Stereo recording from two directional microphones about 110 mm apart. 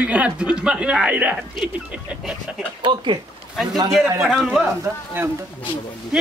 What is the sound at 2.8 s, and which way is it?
Speech, 45° right (ahead or behind).